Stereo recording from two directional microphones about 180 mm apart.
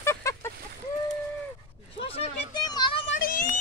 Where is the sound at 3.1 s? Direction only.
55° left (ahead or behind).